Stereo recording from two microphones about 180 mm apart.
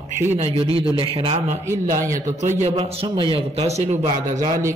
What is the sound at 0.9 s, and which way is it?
A man's voice, 30° right (ahead or behind).